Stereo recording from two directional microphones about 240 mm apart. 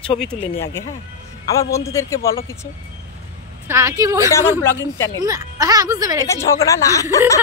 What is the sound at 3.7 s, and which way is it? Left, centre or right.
Speech, centre.